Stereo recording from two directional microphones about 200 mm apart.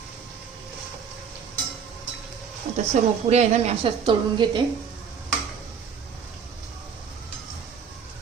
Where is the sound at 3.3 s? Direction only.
35° right (ahead or behind).